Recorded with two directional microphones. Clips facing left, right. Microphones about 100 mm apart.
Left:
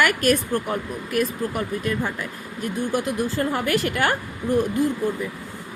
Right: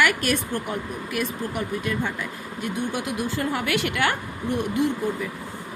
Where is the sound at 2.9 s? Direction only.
40° left (ahead or behind).